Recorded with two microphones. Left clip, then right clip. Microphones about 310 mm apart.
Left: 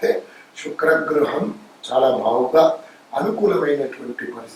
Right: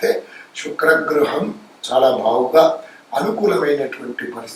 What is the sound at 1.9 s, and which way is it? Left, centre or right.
A man's voice, left.